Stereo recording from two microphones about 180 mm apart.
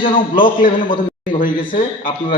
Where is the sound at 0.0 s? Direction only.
50° left (ahead or behind).